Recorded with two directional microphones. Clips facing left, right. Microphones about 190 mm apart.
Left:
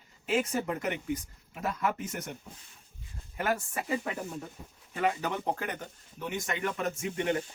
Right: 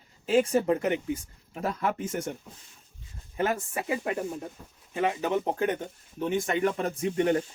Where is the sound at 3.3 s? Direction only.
25° right (ahead or behind).